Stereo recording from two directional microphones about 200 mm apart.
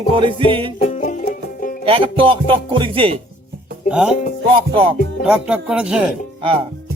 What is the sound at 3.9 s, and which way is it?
Speech, 5° right (ahead or behind).